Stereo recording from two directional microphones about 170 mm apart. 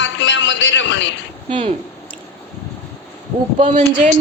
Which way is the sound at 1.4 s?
40° right (ahead or behind).